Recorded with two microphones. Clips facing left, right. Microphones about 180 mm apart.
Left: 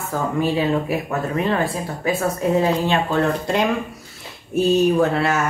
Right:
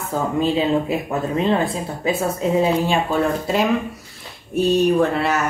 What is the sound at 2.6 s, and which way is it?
Speech, 10° right (ahead or behind).